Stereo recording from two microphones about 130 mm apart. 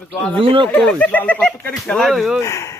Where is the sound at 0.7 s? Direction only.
10° left (ahead or behind).